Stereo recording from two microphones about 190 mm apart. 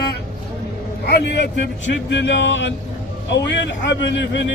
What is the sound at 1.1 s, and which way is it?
Speech, 65° left (ahead or behind).